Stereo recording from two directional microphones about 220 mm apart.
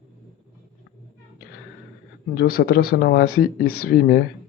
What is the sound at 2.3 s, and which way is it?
Speech, 45° left (ahead or behind).